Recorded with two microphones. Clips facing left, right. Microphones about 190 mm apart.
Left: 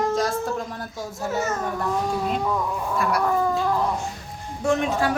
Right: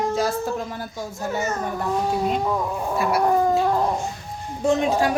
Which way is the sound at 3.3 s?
35° right (ahead or behind).